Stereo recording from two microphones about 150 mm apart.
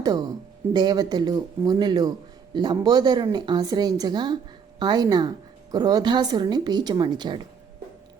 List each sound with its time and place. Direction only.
0.7 s speech: 30° right (ahead or behind)